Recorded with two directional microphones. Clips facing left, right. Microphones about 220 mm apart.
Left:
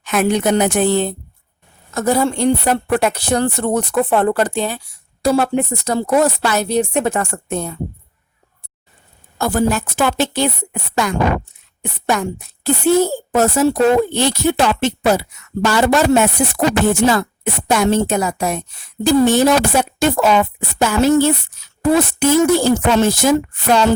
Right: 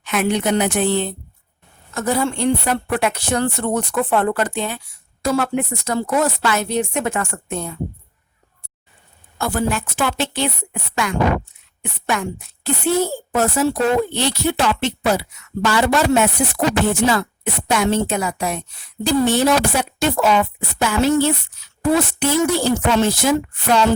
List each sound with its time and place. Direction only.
0.0 s speech: 45° left (ahead or behind)
9.4 s speech: 40° left (ahead or behind)